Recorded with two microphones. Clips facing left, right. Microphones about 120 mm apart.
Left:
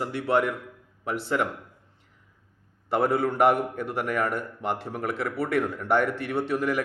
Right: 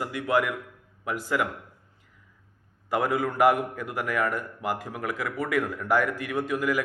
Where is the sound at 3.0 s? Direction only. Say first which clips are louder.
Left 1 dB; 35° left (ahead or behind).